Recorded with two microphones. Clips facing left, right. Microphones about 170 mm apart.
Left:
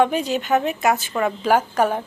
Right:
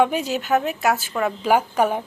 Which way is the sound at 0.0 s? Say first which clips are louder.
Left 1 dB; 10° right (ahead or behind).